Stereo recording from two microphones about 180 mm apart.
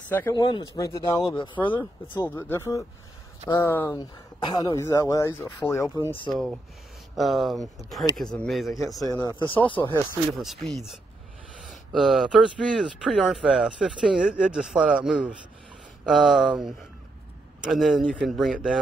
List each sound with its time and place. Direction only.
0.1 s speech: 15° left (ahead or behind)
1.7 s speech: 15° left (ahead or behind)
4.0 s speech: 25° left (ahead or behind)
6.3 s speech: centre (ahead or behind)
9.1 s speech: 20° left (ahead or behind)
10.3 s speech: centre (ahead or behind)